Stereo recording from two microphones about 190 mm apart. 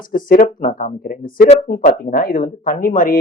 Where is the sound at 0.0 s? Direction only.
45° left (ahead or behind).